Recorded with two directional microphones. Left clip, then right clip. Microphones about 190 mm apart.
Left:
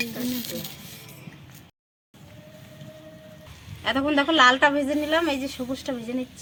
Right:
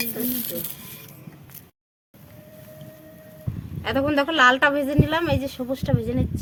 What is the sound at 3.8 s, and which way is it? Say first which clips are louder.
A woman's voice: right 1 dB; 30° right (ahead or behind).